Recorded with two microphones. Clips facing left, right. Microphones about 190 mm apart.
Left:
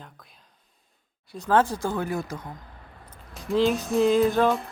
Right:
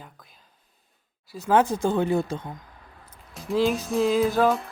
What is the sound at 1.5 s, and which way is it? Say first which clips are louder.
Speech: right 2 dB; 20° right (ahead or behind).